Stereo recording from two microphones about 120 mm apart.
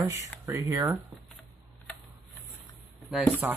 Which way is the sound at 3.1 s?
5° left (ahead or behind).